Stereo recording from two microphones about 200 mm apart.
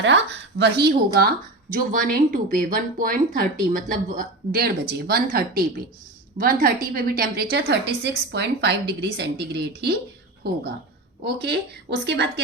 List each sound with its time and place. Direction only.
0.0 s a woman's voice: 60° right (ahead or behind)
7.5 s a woman's voice: 60° right (ahead or behind)
11.2 s a woman's voice: 55° right (ahead or behind)